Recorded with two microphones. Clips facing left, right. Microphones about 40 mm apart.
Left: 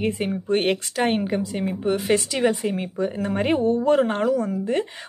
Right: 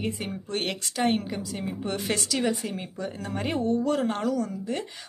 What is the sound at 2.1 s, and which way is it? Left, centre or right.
A woman's voice, left.